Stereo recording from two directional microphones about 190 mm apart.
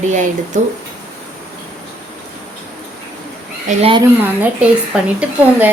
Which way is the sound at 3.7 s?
30° right (ahead or behind).